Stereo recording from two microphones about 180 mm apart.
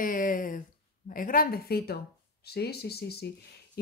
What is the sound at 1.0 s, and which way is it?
Speech, 50° left (ahead or behind).